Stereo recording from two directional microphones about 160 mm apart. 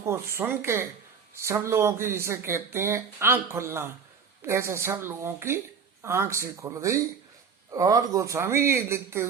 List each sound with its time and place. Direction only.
0.0 s speech: 15° right (ahead or behind)